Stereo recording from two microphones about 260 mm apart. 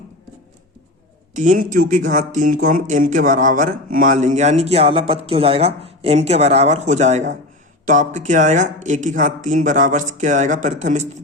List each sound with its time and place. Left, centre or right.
1.3 s speech: right